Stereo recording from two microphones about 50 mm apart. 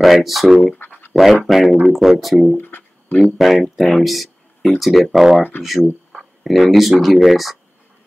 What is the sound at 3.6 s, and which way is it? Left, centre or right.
Speech, centre.